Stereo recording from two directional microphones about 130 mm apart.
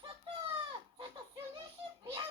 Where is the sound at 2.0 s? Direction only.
35° right (ahead or behind).